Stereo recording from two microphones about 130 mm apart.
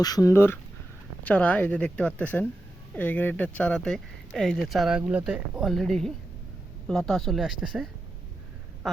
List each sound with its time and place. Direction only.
0.0 s speech: 25° left (ahead or behind); by 7.9 s centre (ahead or behind)